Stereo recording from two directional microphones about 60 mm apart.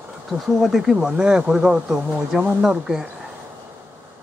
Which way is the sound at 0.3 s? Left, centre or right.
Centre.